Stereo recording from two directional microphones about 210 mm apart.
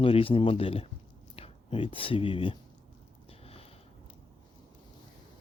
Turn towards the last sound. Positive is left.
turn(degrees=25)  # may be behind; listen again after turning